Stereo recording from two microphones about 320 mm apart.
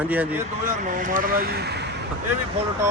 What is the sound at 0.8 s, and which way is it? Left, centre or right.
Speech, right.